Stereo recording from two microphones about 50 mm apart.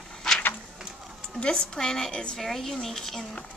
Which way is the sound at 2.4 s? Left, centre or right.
Centre.